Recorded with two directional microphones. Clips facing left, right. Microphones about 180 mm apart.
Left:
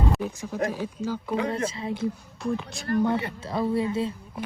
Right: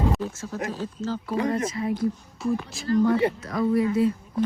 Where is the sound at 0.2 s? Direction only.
15° left (ahead or behind).